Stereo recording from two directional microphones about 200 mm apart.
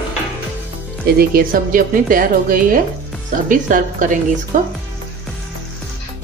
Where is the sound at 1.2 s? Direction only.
45° right (ahead or behind).